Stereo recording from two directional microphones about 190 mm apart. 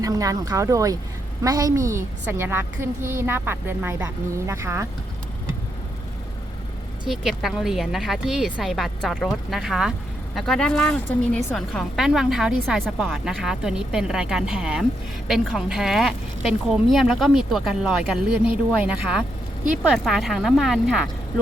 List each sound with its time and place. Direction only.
0.0 s a woman's voice: 20° right (ahead or behind)
7.1 s a woman's voice: centre (ahead or behind)